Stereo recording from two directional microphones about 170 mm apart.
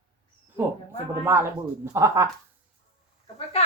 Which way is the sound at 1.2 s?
15° right (ahead or behind).